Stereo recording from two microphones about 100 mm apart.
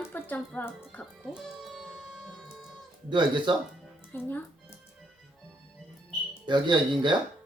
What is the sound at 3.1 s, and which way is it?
Speech, 50° right (ahead or behind).